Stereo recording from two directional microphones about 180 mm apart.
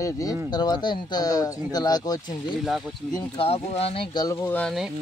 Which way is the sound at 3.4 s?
35° left (ahead or behind).